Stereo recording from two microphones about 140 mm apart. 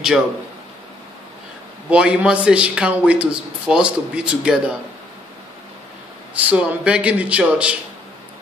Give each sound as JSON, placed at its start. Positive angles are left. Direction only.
{"t": 1.9, "sound": "a man's voice", "side_deg": -10}
{"t": 6.3, "sound": "a man's voice", "side_deg": -10}